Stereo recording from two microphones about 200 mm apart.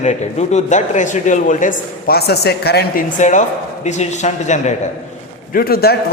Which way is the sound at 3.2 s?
35° left (ahead or behind).